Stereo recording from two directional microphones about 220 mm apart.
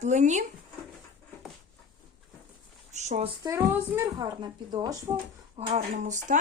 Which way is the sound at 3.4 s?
10° right (ahead or behind).